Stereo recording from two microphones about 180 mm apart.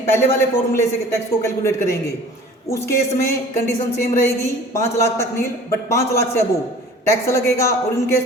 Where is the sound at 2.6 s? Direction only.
15° left (ahead or behind).